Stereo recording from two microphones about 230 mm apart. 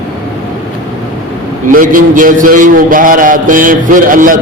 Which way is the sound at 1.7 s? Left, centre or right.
Right.